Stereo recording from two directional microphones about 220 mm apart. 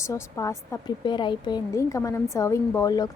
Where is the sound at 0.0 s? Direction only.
15° left (ahead or behind).